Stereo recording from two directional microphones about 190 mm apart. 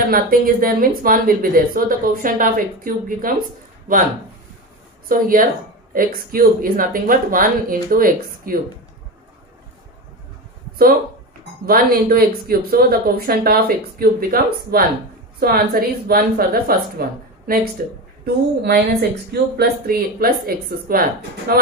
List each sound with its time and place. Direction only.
0.1 s speech: 50° right (ahead or behind)
11.6 s speech: 50° right (ahead or behind)
18.2 s a woman's voice: 55° right (ahead or behind)